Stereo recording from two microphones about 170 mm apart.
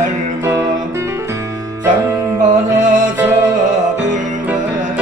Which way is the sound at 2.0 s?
10° right (ahead or behind).